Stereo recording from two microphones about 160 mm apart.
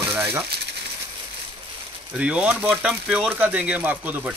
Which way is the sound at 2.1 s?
5° right (ahead or behind).